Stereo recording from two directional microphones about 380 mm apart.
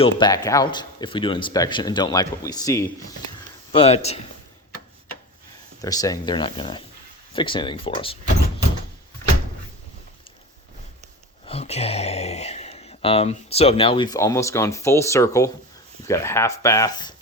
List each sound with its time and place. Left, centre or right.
0.0 s speech: centre
5.8 s speech: centre
11.4 s speech: centre